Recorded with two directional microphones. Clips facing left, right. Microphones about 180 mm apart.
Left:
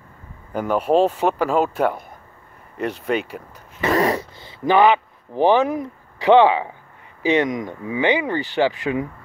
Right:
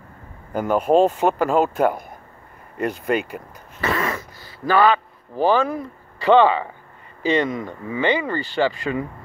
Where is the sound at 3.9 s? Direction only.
35° left (ahead or behind); by 6.7 s 15° left (ahead or behind).